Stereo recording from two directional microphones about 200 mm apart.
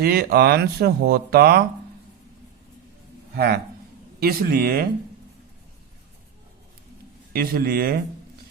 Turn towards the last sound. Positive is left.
turn(degrees=-50)  # may be behind; listen again after turning